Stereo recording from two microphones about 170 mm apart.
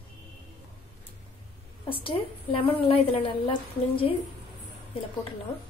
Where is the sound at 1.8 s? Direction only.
30° left (ahead or behind).